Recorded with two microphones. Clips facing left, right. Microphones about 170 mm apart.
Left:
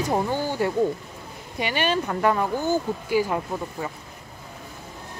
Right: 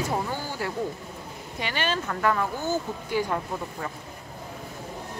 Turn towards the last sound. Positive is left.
turn(degrees=10)  # may be behind; listen again after turning